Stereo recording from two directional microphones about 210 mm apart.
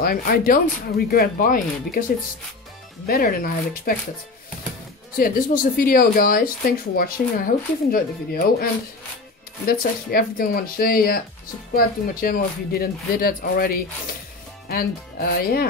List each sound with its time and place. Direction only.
0.0 s speech: 45° left (ahead or behind)
3.1 s speech: 45° left (ahead or behind)
5.1 s speech: 45° left (ahead or behind)
9.7 s speech: 45° left (ahead or behind)